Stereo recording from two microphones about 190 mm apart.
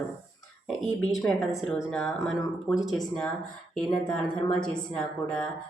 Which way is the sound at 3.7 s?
5° left (ahead or behind).